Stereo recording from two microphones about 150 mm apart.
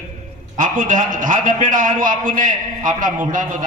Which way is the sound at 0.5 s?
60° right (ahead or behind).